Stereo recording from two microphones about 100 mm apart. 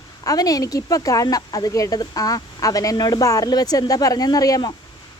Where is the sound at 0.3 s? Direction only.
35° left (ahead or behind).